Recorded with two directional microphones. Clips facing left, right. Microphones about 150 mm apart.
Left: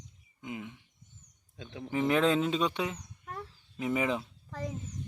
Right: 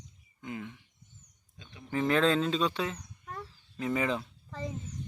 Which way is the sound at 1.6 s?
90° left.